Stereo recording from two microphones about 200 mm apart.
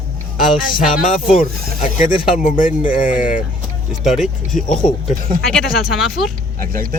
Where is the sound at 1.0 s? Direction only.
40° left (ahead or behind).